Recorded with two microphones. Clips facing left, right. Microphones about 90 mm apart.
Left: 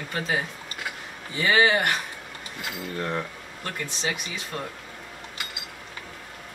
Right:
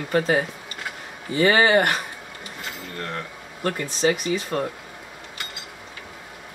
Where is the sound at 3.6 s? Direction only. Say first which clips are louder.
Right 9 dB; 40° right (ahead or behind).